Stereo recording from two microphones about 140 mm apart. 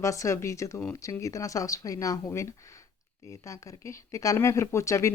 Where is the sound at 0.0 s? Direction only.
20° left (ahead or behind).